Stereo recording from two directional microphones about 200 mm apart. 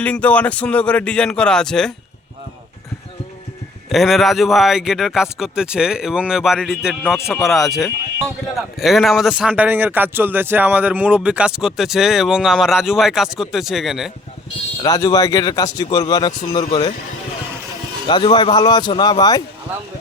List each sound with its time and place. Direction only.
0.0 s speech: 5° left (ahead or behind)
3.8 s speech: centre (ahead or behind)
14.8 s speech: 20° left (ahead or behind)
18.1 s speech: 20° left (ahead or behind)